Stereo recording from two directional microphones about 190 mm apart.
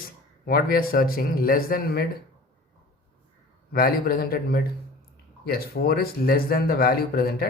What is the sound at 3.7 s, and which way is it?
Speech, 50° left (ahead or behind).